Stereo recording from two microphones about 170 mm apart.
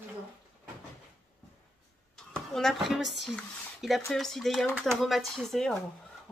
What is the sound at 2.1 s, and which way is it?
Speech, centre (ahead or behind).